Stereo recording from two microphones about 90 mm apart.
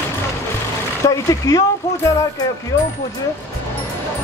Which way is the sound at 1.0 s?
40° left (ahead or behind).